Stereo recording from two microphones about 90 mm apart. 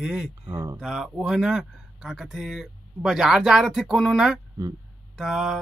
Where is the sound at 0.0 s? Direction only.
5° right (ahead or behind).